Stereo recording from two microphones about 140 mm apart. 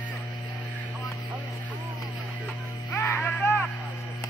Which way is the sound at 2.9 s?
15° left (ahead or behind).